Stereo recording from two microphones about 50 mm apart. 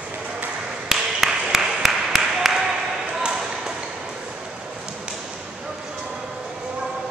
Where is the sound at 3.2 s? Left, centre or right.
Centre.